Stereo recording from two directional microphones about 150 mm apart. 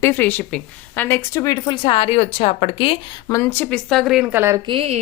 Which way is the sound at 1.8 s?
40° left (ahead or behind).